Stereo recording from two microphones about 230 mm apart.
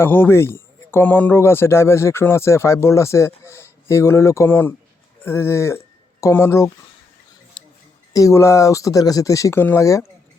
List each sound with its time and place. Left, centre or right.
0.0 s a man's voice: centre
7.6 s scissors: left
8.1 s a man's voice: centre